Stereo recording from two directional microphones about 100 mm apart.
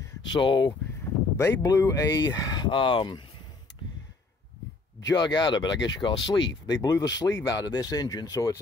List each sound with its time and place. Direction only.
0.3 s speech: 50° left (ahead or behind)
1.3 s speech: 25° left (ahead or behind)
2.2 s speech: 45° left (ahead or behind)
5.1 s speech: 45° left (ahead or behind)